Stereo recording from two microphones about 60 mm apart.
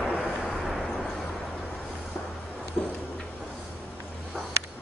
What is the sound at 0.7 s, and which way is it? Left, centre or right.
Vehicle, centre.